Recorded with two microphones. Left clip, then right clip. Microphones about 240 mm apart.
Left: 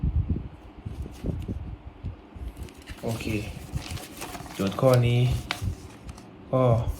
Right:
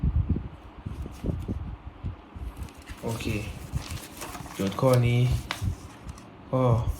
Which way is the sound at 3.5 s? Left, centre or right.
Centre.